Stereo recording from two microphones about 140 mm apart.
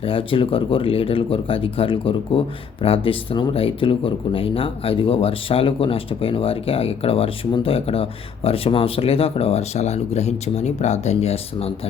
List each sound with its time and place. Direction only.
0.0 s speech: 40° left (ahead or behind)